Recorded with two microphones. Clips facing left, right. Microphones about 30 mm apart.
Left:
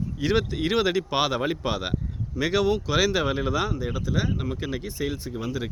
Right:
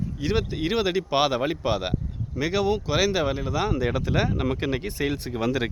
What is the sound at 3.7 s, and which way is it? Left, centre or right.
Speech, right.